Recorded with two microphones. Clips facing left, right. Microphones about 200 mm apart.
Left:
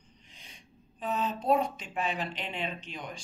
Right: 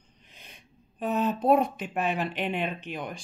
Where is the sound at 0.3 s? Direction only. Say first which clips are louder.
Right 3 dB; 55° right (ahead or behind).